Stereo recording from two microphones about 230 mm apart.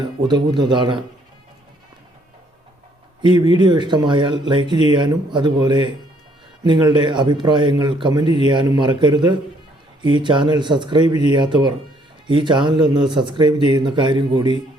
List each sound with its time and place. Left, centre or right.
0.0 s speech: centre
3.2 s speech: centre